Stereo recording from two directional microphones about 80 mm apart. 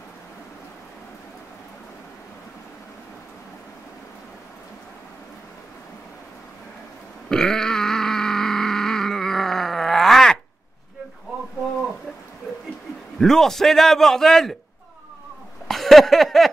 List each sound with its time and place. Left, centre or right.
7.2 s grunt: centre
13.2 s a man's voice: centre
15.7 s a sound: centre